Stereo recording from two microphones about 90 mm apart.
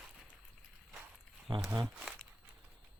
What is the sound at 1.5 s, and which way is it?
Speech, 55° right (ahead or behind).